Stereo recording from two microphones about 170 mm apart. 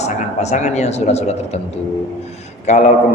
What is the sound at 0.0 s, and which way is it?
A man's voice, 40° left (ahead or behind).